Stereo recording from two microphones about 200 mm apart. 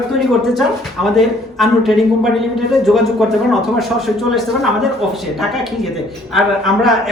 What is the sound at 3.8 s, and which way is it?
Speech, centre (ahead or behind).